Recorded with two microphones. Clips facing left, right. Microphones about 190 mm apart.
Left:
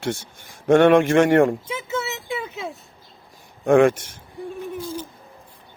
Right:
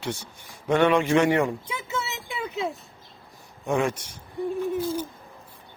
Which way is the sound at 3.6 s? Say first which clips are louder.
Left 10 dB; 60° left (ahead or behind).